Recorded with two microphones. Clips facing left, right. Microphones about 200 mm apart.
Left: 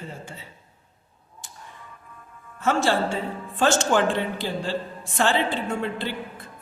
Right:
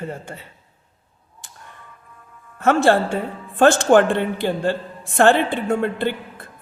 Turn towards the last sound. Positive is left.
turn(degrees=-55)  # may be behind; listen again after turning